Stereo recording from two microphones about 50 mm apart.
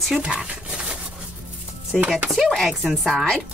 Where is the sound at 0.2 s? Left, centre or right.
Right.